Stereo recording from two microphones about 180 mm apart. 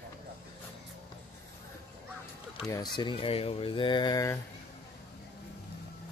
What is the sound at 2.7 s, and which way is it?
Speech, 25° left (ahead or behind).